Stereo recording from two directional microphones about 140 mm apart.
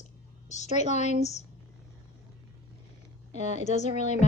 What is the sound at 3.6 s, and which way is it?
Speech, 55° left (ahead or behind).